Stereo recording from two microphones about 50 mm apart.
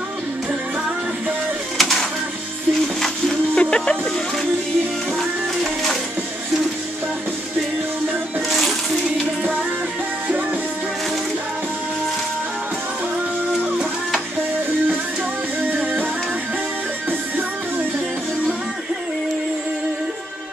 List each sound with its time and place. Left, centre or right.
1.8 s a sound: centre
3.0 s music: centre
8.5 s music: centre
15.7 s music: right